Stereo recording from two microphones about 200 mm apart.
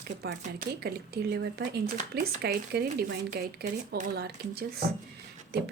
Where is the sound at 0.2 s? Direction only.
50° right (ahead or behind).